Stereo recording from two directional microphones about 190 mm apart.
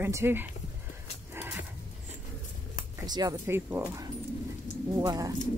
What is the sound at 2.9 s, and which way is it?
Speech, 20° right (ahead or behind).